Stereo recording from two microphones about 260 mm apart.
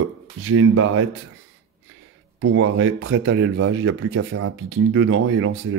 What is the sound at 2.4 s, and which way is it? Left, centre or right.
Speech, right.